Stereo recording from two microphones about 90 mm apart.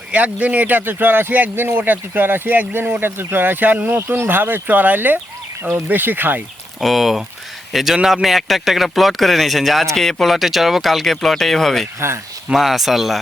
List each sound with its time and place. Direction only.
0.1 s speech: 15° right (ahead or behind)
6.7 s a man's voice: centre (ahead or behind)
11.9 s speech: 30° right (ahead or behind)
12.5 s a man's voice: centre (ahead or behind)